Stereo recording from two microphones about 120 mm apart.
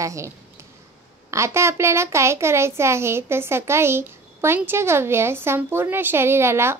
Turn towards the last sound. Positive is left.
turn(degrees=-20)  # may be behind; listen again after turning